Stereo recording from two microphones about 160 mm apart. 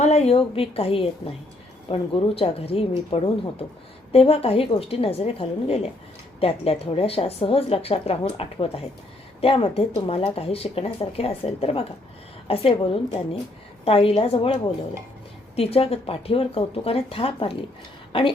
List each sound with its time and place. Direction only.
0.0 s a woman's voice: 45° left (ahead or behind)